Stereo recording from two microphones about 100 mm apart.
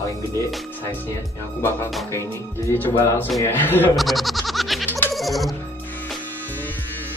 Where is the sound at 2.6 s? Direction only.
25° left (ahead or behind).